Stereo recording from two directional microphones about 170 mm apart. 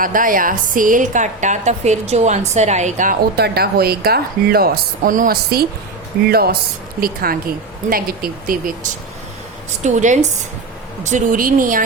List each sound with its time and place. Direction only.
0.0 s a woman's voice: 55° right (ahead or behind)
3.3 s speech: 70° right (ahead or behind)
9.8 s a woman's voice: 45° right (ahead or behind)